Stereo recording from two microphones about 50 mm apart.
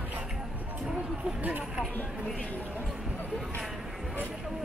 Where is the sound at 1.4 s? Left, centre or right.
Right.